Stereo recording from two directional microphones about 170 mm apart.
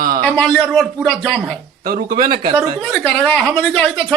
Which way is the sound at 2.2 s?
30° right (ahead or behind).